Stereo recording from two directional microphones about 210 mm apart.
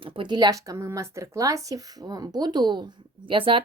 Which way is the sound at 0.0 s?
20° right (ahead or behind).